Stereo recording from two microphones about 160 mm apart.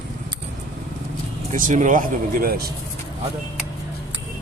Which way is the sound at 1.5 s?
55° right (ahead or behind).